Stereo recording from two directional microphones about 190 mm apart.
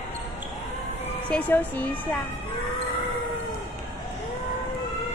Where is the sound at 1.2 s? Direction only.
5° left (ahead or behind).